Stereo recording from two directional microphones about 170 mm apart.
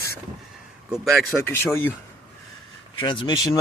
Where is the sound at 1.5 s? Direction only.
15° left (ahead or behind).